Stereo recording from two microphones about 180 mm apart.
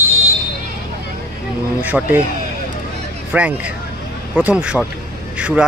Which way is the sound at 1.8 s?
10° right (ahead or behind).